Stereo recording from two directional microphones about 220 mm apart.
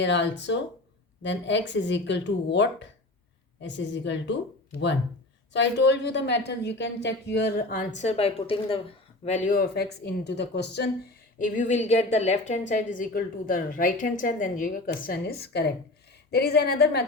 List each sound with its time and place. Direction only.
0.0 s a woman's voice: 55° left (ahead or behind)
5.5 s a woman's voice: 50° left (ahead or behind)